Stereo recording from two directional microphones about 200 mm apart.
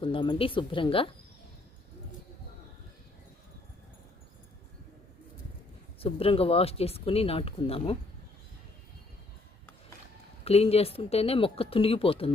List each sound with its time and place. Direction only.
0.0 s speech: 25° left (ahead or behind)
6.0 s speech: 30° left (ahead or behind)
10.4 s speech: 30° left (ahead or behind)